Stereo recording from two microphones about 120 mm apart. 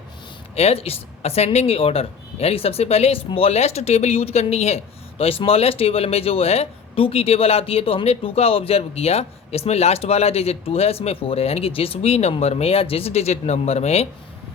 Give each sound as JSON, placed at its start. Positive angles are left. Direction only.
{"t": 0.5, "sound": "a woman's voice", "side_deg": 60}